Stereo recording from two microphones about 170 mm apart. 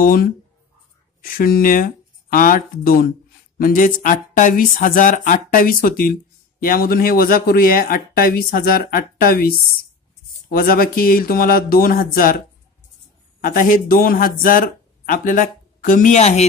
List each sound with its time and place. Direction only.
0.0 s speech: 55° left (ahead or behind)